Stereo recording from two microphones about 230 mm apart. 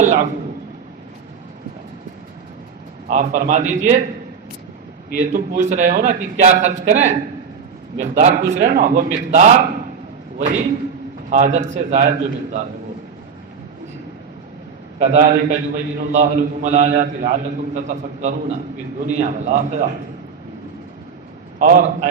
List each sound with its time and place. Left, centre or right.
0.0 s a man's voice: right
3.1 s a man's voice: right
5.3 s a man's voice: right
14.9 s a man's voice: right
21.6 s a man's voice: right